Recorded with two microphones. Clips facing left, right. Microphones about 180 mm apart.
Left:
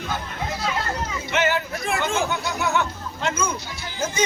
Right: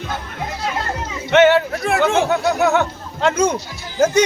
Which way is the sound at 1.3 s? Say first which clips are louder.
Right 11 dB; 70° right (ahead or behind).